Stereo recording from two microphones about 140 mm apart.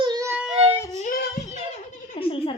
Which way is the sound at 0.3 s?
10° right (ahead or behind).